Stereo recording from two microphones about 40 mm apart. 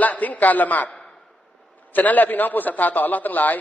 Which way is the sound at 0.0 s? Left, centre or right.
Left.